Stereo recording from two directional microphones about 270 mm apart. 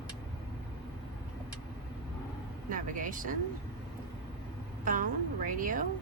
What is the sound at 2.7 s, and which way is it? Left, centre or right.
Speech, right.